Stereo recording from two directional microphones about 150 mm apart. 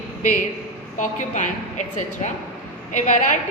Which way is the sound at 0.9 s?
55° left (ahead or behind).